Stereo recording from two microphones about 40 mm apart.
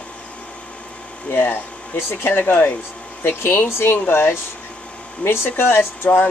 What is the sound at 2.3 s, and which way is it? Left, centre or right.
Speech, left.